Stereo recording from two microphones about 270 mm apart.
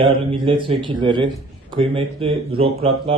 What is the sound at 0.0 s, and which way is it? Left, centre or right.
A man's voice, centre.